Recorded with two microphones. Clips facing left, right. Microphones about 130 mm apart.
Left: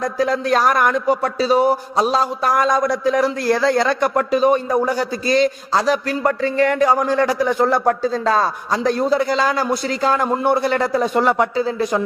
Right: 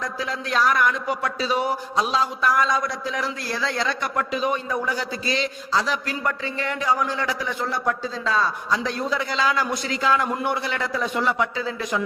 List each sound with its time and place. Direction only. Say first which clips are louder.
0.0 s a man's voice: left 10 dB; 45° left (ahead or behind)
1.1 s a man's voice: left 8 dB; 35° left (ahead or behind)